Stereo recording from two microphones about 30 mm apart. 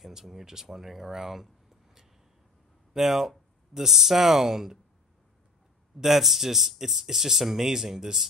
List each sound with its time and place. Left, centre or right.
0.0 s speech: centre
6.0 s speech: centre